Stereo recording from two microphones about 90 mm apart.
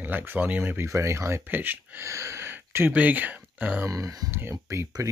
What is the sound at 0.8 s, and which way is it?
Speech, 30° right (ahead or behind).